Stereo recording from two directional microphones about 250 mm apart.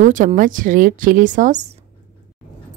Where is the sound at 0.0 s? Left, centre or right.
Right.